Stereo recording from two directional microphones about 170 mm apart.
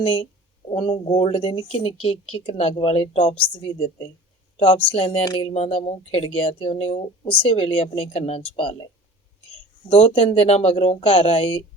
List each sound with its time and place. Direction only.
0.0 s speech: 35° left (ahead or behind)
9.9 s speech: 35° left (ahead or behind)